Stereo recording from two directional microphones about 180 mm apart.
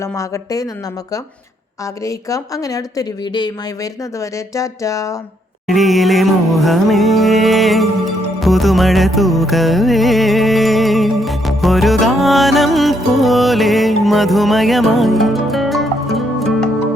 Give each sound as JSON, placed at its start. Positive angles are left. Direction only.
{"t": 0.0, "sound": "speech", "side_deg": 20}
{"t": 2.0, "sound": "speech", "side_deg": 20}
{"t": 4.2, "sound": "a sound", "side_deg": 15}
{"t": 5.6, "sound": "music", "side_deg": 0}